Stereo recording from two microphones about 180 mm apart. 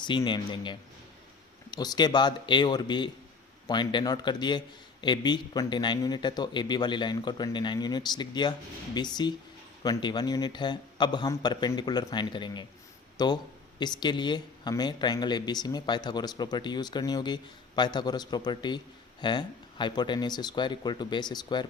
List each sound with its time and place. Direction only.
0.0 s speech: 25° left (ahead or behind)